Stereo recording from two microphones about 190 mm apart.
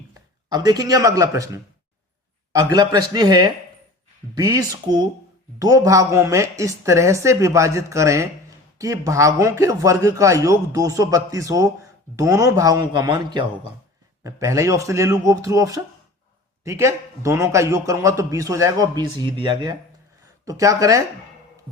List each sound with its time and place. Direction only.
0.5 s a man's voice: 20° right (ahead or behind)